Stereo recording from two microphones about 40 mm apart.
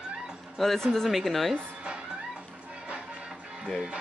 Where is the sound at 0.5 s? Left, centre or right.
Centre.